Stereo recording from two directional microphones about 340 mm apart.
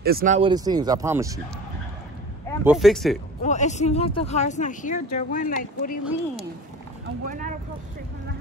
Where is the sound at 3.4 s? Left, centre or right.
Left.